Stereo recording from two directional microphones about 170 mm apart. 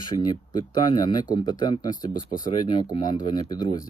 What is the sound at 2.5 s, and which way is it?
Speech, 25° left (ahead or behind).